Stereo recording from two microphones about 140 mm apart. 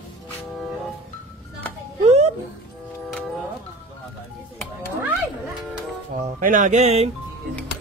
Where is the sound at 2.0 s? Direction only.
45° right (ahead or behind).